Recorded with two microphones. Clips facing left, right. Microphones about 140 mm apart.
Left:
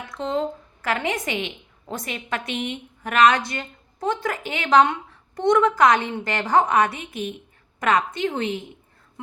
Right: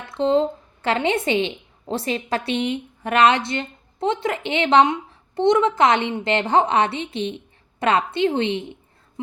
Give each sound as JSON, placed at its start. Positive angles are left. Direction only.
{"t": 0.1, "sound": "a woman's voice", "side_deg": -30}